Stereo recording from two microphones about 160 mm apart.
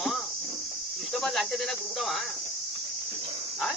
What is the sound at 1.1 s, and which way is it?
A man's voice, centre (ahead or behind).